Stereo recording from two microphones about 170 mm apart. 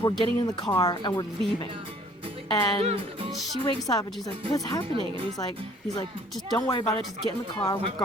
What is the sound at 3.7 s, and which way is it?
Speech, 20° left (ahead or behind).